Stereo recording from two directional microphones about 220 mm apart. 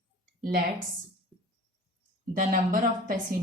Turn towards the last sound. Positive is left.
turn(degrees=-40)  # may be behind; listen again after turning